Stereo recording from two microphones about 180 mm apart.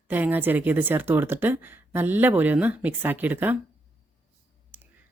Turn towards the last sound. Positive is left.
turn(degrees=-10)  # may be behind; listen again after turning